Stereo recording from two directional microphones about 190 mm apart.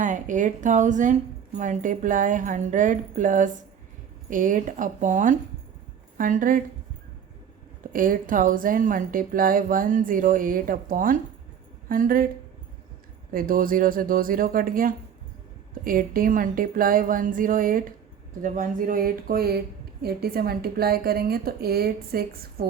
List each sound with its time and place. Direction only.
0.0 s speech: 40° right (ahead or behind)
7.9 s speech: 45° right (ahead or behind)
13.3 s speech: 50° right (ahead or behind)